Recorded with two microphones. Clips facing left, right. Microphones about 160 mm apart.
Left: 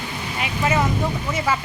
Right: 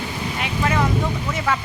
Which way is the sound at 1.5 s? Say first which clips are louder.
Even; 5° left (ahead or behind).